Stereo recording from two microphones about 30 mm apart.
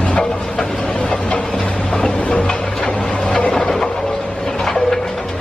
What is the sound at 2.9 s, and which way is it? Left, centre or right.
Printer, left.